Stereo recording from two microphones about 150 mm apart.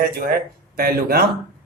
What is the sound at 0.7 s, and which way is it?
Speech, 90° right.